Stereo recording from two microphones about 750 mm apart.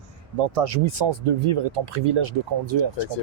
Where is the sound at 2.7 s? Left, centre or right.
Right.